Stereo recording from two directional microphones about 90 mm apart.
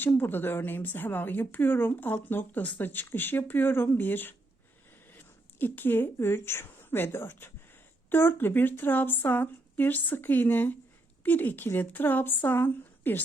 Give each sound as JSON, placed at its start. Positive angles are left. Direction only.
{"t": 0.0, "sound": "speech", "side_deg": 25}